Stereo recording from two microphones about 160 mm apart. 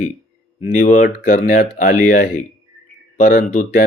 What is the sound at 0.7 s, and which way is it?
Speech, 55° left (ahead or behind).